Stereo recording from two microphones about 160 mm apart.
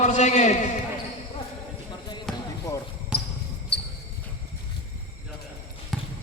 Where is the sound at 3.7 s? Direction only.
90° left.